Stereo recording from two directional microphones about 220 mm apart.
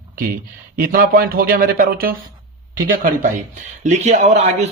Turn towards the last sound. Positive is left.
turn(degrees=-30)  # may be behind; listen again after turning